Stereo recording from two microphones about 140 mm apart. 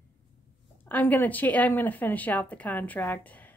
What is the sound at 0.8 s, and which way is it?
A woman's voice, 10° left (ahead or behind).